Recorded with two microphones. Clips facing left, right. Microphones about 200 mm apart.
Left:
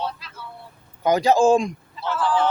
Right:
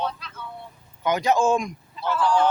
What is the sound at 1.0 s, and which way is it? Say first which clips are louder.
Speech: left 4 dB; 35° left (ahead or behind).